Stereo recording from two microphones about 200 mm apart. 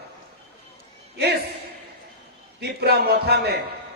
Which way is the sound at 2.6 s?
55° right (ahead or behind).